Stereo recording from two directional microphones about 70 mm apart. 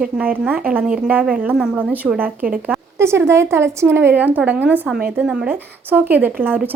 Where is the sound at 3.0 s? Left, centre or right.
Right.